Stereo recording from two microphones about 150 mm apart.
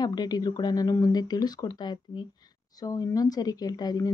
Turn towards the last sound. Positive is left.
turn(degrees=25)  # may be behind; listen again after turning